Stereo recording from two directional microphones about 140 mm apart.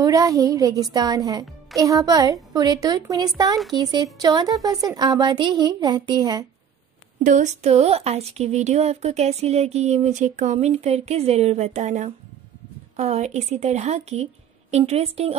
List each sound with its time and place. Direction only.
0.0 s a woman's voice: 25° right (ahead or behind)
7.2 s speech: 55° right (ahead or behind)